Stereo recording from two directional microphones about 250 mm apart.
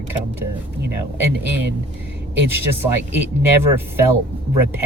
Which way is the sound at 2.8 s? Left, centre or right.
Centre.